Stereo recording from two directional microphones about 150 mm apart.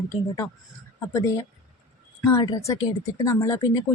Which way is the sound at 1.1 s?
20° left (ahead or behind).